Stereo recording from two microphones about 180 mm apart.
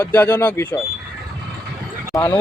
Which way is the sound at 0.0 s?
10° left (ahead or behind).